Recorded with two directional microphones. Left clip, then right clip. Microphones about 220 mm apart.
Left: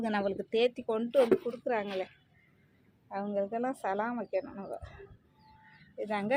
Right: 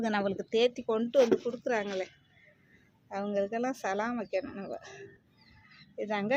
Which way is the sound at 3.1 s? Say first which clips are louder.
Right 2 dB; 5° right (ahead or behind).